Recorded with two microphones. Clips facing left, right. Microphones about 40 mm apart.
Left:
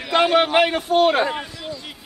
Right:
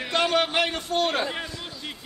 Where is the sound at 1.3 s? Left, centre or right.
Centre.